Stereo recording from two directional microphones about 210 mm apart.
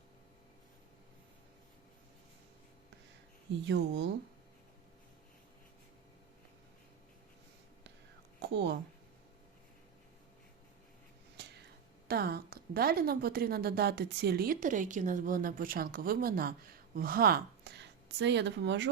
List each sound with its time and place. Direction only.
3.7 s speech: 55° right (ahead or behind)
8.4 s a woman's voice: 55° right (ahead or behind)
12.0 s a woman's voice: 50° right (ahead or behind)